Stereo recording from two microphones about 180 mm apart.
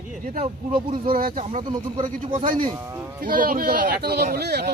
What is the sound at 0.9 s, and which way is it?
Speech, 50° right (ahead or behind).